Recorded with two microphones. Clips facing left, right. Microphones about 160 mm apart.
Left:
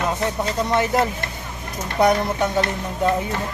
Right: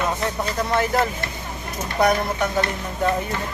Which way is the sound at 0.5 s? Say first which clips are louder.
Left 1 dB; 20° left (ahead or behind).